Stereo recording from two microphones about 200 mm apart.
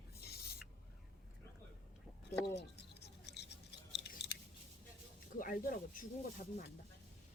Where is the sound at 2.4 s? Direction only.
60° left (ahead or behind).